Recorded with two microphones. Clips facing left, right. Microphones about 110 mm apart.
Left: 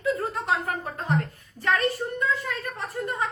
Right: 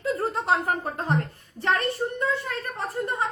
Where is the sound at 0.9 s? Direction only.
30° right (ahead or behind).